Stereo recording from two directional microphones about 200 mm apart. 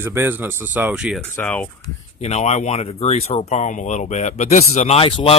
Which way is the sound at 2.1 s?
35° left (ahead or behind).